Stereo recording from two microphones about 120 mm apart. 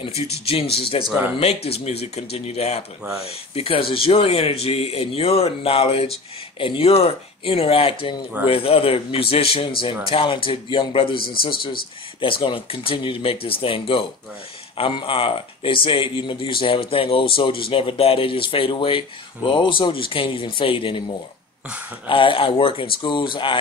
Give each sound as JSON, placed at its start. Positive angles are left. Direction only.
{"t": 0.5, "sound": "a man's voice", "side_deg": 55}
{"t": 22.0, "sound": "speech", "side_deg": 45}